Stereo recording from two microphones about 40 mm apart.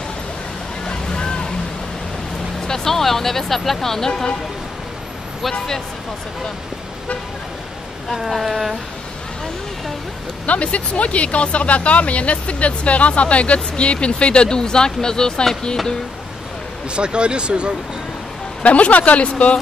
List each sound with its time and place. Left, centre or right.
0.8 s boat: left
2.6 s speech: centre
8.1 s speech: centre
10.4 s speech: left; by 15.4 s centre
16.9 s speech: right
18.6 s speech: left